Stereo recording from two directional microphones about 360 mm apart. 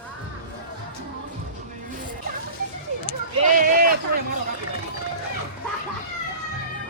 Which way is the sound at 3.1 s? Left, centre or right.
Right.